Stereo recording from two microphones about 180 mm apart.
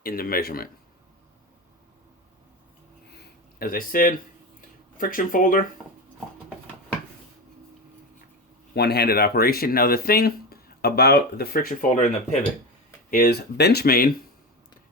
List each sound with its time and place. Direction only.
0.0 s speech: 55° left (ahead or behind)
3.6 s speech: 55° left (ahead or behind)
8.7 s speech: 65° left (ahead or behind); by 12.1 s 45° left (ahead or behind)
13.1 s speech: 55° left (ahead or behind)